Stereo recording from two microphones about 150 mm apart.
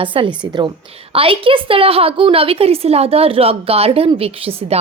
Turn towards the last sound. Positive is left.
turn(degrees=-40)  # may be behind; listen again after turning